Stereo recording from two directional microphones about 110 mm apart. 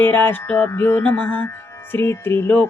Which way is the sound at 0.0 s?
20° left (ahead or behind).